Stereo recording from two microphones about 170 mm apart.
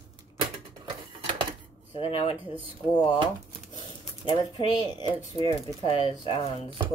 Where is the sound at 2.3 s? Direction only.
10° right (ahead or behind).